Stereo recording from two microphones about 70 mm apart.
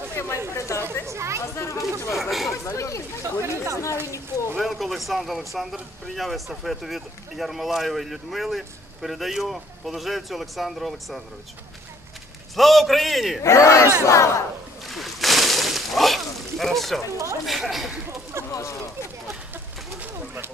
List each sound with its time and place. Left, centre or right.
0.1 s a sound: left
0.6 s speech: left
1.0 s speech: right
1.5 s speech: left
2.1 s speech: centre
2.6 s speech: left
3.4 s speech: right
4.6 s speech: centre
12.5 s speech: centre
13.4 s speech: left
14.9 s slosh: centre
17.5 s a sound: centre
18.5 s a sound: left